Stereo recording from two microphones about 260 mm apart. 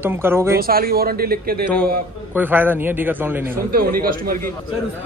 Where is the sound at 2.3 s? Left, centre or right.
Centre.